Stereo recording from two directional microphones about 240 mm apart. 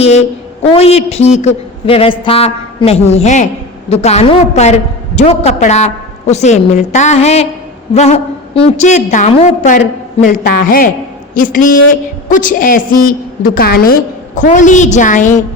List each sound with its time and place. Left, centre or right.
0.0 s a woman's voice: left